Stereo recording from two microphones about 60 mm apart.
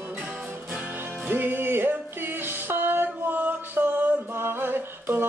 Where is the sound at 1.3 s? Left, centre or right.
Right.